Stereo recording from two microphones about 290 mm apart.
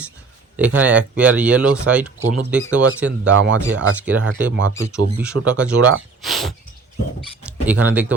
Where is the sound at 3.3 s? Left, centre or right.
Right.